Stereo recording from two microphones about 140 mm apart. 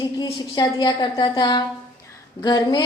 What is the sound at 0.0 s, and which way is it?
A woman's voice, 30° left (ahead or behind).